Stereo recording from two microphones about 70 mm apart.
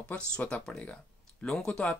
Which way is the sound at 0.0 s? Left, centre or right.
Centre.